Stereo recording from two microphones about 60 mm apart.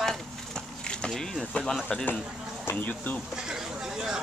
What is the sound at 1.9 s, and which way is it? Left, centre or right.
Speech, centre.